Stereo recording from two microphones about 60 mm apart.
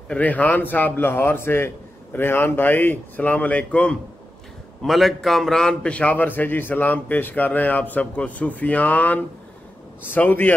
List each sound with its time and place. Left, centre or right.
0.1 s speech: left
4.8 s a man's voice: centre; by 10.5 s left